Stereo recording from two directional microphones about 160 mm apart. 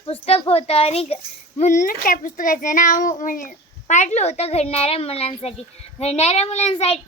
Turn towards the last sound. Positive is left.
turn(degrees=40)  # may be behind; listen again after turning